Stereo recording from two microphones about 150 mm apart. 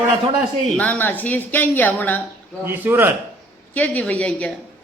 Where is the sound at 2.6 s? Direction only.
15° right (ahead or behind).